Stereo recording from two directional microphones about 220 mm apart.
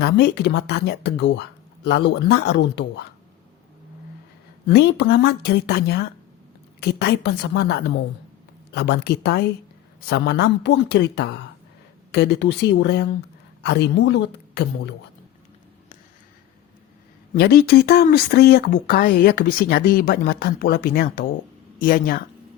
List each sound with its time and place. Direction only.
0.0 s speech: 50° left (ahead or behind)
4.7 s speech: 50° left (ahead or behind)
17.3 s speech: 45° left (ahead or behind)